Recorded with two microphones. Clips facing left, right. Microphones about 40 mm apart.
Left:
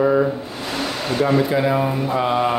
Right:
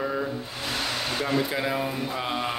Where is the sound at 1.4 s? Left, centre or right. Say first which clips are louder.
Left 8 dB; centre.